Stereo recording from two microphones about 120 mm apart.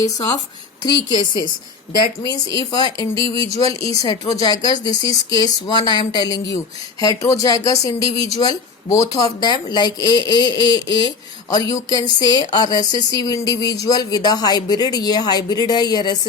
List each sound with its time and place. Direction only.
0.8 s speech: 40° left (ahead or behind)